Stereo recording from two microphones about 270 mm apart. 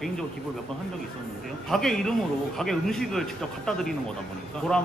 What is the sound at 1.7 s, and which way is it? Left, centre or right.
Speech, centre.